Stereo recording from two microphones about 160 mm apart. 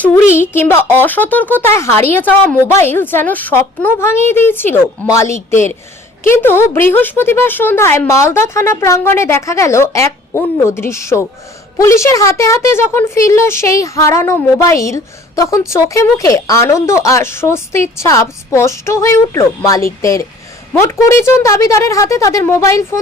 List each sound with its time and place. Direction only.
0.0 s a woman's voice: 10° left (ahead or behind)